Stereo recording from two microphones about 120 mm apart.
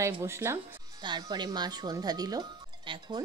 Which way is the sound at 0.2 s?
20° right (ahead or behind).